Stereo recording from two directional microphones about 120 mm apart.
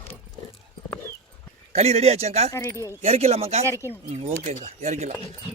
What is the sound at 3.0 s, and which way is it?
Speech, 65° right (ahead or behind).